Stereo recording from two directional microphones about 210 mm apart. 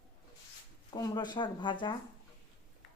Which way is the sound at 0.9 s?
20° left (ahead or behind).